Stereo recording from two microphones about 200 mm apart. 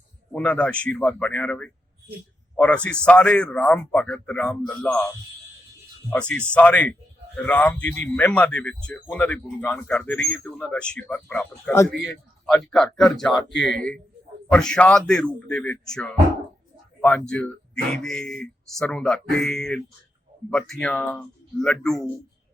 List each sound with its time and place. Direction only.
0.3 s a man's voice: 5° left (ahead or behind)
6.1 s a man's voice: 5° left (ahead or behind)
14.5 s a man's voice: 5° left (ahead or behind)